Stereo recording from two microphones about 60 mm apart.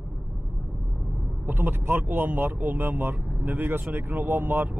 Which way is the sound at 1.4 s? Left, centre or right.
Right.